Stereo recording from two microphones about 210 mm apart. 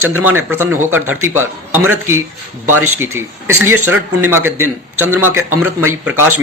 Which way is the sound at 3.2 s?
10° right (ahead or behind).